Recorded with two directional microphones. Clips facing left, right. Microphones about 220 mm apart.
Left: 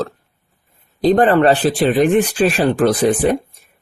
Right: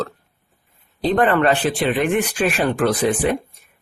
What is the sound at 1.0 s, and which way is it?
Speech, 35° left (ahead or behind).